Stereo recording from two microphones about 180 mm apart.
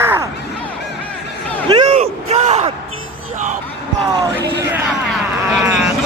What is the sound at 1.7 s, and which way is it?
Bellow, 35° right (ahead or behind).